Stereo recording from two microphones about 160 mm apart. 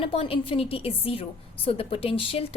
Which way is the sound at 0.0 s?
35° left (ahead or behind).